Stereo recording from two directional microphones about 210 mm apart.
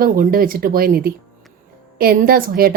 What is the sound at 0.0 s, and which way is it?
A woman's voice, 40° right (ahead or behind).